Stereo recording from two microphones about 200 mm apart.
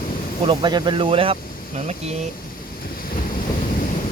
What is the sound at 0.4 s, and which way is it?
Speech, 20° right (ahead or behind).